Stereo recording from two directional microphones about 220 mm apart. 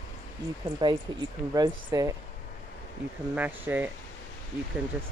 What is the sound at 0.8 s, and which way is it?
Speech, 20° right (ahead or behind).